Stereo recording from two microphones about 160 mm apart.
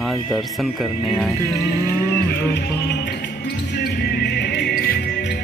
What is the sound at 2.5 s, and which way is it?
Music, 90° left.